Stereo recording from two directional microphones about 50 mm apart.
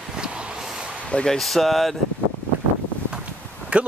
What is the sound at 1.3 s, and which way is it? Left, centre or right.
Speech, centre.